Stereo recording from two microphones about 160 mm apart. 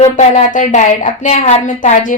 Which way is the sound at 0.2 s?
50° left (ahead or behind).